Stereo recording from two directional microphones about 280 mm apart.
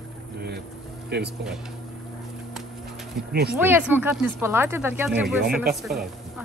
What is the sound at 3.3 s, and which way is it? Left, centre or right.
Speech, right.